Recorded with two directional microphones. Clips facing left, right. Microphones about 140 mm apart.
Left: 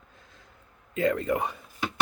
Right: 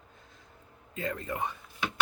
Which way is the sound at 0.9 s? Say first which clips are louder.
Left 10 dB; 90° left.